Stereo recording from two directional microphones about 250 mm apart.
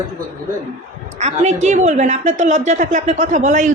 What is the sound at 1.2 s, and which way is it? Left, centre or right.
A woman's voice, right.